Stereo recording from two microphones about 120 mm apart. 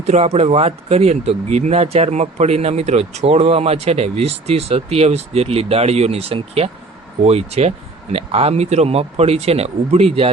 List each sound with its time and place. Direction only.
0.0 s speech: 65° right (ahead or behind)